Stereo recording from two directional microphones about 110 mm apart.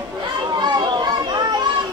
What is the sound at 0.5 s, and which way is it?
Children playing, 40° right (ahead or behind).